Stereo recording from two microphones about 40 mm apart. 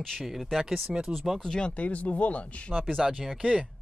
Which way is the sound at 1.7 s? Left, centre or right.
Left.